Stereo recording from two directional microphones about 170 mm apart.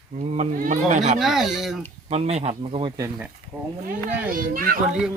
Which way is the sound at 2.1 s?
40° right (ahead or behind).